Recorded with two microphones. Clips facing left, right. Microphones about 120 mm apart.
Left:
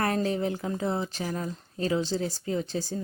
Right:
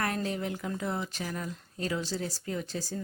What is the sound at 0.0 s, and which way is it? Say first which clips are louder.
Speech: left 5 dB; 30° left (ahead or behind).